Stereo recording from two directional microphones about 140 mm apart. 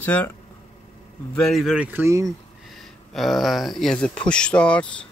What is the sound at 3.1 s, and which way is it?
Speech, centre (ahead or behind).